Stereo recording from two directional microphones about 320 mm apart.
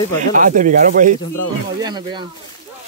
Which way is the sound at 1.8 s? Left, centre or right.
Centre.